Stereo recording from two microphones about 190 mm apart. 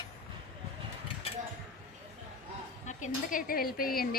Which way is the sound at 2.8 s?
40° left (ahead or behind).